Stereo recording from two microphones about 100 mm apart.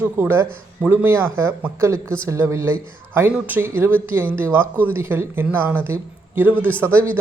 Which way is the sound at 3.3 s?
15° right (ahead or behind).